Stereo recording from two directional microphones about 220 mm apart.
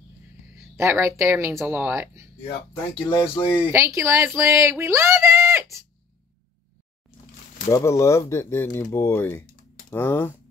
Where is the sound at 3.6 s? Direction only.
10° right (ahead or behind).